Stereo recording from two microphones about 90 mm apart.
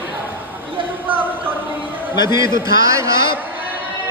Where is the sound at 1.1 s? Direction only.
20° right (ahead or behind).